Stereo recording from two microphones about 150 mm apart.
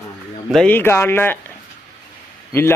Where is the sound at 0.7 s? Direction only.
15° left (ahead or behind).